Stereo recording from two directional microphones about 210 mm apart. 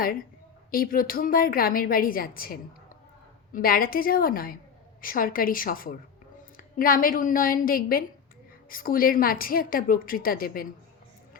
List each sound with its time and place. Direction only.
0.7 s a woman's voice: 45° left (ahead or behind)